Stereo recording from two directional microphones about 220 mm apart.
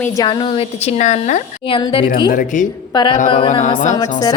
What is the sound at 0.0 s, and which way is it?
A woman's voice, 15° left (ahead or behind).